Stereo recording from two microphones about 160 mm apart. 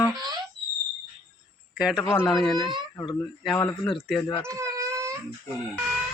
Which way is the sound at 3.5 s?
15° left (ahead or behind).